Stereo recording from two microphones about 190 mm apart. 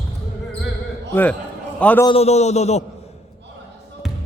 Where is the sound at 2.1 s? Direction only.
35° left (ahead or behind).